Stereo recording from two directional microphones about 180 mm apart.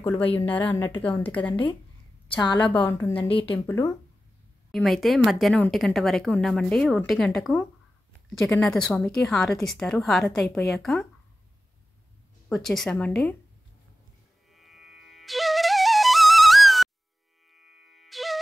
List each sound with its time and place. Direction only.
0.0 s a woman's voice: 10° left (ahead or behind)
2.7 s a woman's voice: 15° left (ahead or behind)
3.3 s speech: 30° left (ahead or behind)
3.5 s a woman's voice: 15° left (ahead or behind)
4.6 s a woman's voice: centre (ahead or behind)
12.4 s a woman's voice: centre (ahead or behind)
14.5 s flute: centre (ahead or behind)
17.5 s music: centre (ahead or behind)